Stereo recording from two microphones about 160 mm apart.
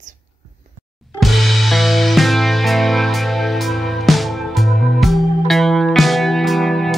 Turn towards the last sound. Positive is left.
turn(degrees=0)  # may be behind; listen again after turning